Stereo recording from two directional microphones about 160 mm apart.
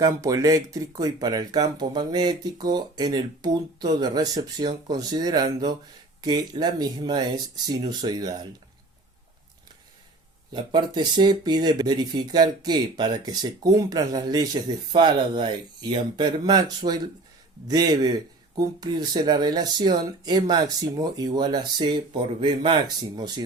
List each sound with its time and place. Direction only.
0.0 s speech: 20° right (ahead or behind)
10.5 s speech: 30° right (ahead or behind)